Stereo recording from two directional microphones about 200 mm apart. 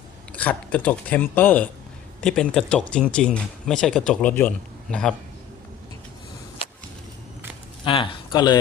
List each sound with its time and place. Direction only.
0.3 s speech: 5° left (ahead or behind)
7.9 s speech: 25° left (ahead or behind)